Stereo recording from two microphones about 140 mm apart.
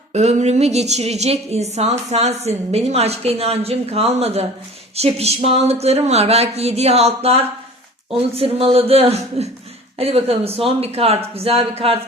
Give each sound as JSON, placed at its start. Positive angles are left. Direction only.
{"t": 0.1, "sound": "a woman's voice", "side_deg": -55}